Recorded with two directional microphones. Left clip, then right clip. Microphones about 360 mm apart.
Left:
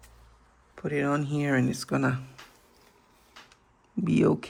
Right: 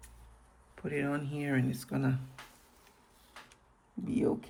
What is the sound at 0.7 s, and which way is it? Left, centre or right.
Speech, centre.